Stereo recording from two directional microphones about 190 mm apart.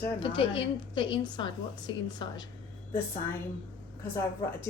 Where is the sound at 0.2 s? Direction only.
25° left (ahead or behind).